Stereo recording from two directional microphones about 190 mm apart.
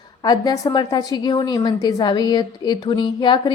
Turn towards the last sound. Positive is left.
turn(degrees=25)  # may be behind; listen again after turning